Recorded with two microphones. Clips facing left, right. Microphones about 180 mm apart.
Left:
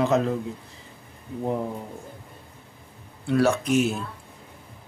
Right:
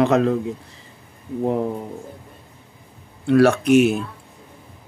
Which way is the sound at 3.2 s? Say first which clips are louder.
Right 7 dB; 70° right (ahead or behind).